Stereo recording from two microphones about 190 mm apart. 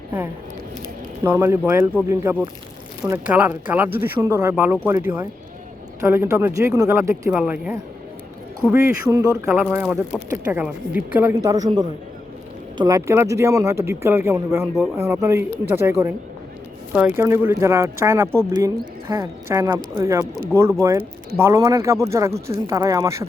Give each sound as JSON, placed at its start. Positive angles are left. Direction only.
{"t": 1.2, "sound": "speech", "side_deg": -10}
{"t": 12.7, "sound": "speech", "side_deg": -20}